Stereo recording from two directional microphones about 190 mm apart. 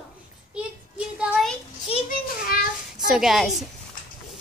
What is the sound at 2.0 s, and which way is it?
Speech, 50° left (ahead or behind).